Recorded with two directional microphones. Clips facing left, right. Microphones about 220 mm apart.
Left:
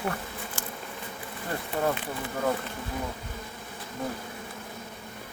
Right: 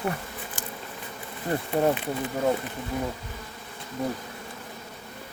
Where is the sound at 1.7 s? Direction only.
20° right (ahead or behind).